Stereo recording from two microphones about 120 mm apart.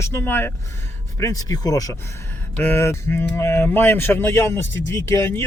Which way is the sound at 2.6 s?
20° left (ahead or behind).